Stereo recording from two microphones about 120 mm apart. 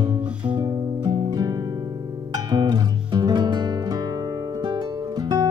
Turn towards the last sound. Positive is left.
turn(degrees=-35)  # may be behind; listen again after turning